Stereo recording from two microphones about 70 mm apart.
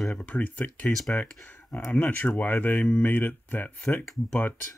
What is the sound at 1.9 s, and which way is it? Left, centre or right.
Speech, left.